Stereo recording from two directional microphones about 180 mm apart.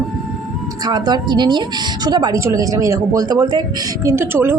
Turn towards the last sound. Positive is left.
turn(degrees=-15)  # may be behind; listen again after turning